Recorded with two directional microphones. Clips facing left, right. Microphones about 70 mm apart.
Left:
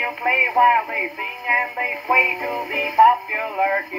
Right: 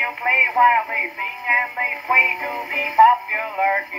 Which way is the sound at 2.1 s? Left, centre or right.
Right.